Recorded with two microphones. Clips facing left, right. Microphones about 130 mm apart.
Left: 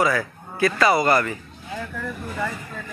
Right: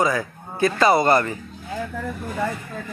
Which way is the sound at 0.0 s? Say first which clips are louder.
Even; 20° right (ahead or behind).